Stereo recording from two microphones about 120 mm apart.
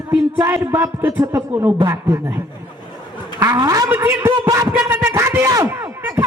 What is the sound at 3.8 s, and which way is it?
Music, 20° right (ahead or behind).